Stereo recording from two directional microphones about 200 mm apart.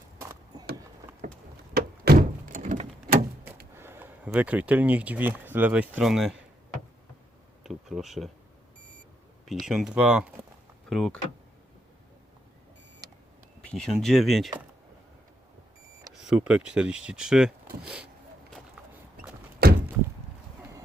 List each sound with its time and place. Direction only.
0.2 s a sound: 15° right (ahead or behind)
1.2 s a sound: 40° right (ahead or behind)
1.7 s door: 50° right (ahead or behind)
3.8 s speech: 10° right (ahead or behind)
7.6 s a sound: centre (ahead or behind)
9.5 s speech: centre (ahead or behind)
13.7 s speech: 5° left (ahead or behind)
16.1 s speech: 5° right (ahead or behind)
19.6 s door: 50° right (ahead or behind)